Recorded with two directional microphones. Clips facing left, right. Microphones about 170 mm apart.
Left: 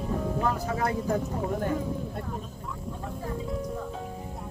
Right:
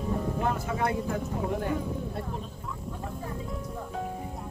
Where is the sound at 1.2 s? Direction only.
Centre (ahead or behind).